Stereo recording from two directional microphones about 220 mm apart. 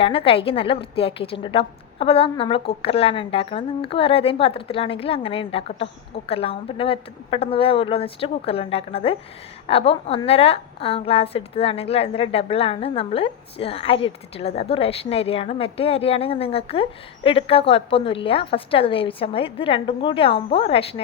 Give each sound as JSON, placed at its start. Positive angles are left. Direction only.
{"t": 0.0, "sound": "a woman's voice", "side_deg": 25}